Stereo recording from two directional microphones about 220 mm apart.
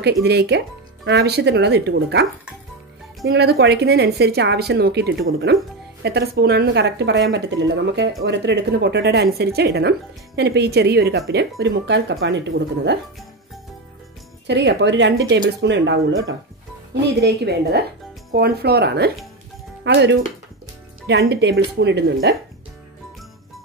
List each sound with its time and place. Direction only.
0.0 s a woman's voice: 50° right (ahead or behind)
3.3 s a woman's voice: 50° right (ahead or behind)
14.5 s a woman's voice: 55° right (ahead or behind)
17.0 s a woman's voice: 50° right (ahead or behind)